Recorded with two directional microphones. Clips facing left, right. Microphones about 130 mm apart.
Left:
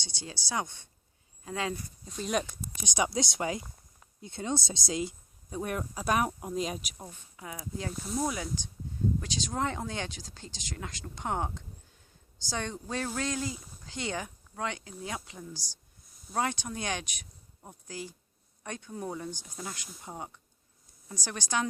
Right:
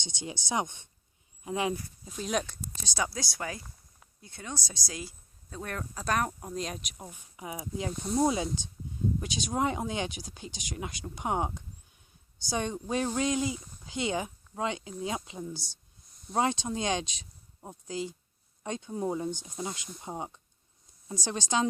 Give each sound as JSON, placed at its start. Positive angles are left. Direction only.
{"t": 0.0, "sound": "speech", "side_deg": -20}
{"t": 2.0, "sound": "speech", "side_deg": 0}
{"t": 2.8, "sound": "speech", "side_deg": 20}
{"t": 7.1, "sound": "speech", "side_deg": -20}